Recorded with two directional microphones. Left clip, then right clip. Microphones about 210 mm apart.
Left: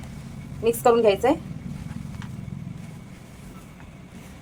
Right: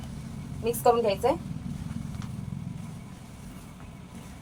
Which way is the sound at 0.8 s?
45° left (ahead or behind).